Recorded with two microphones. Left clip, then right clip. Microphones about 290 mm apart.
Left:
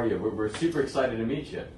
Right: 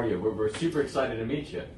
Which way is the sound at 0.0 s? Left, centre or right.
Centre.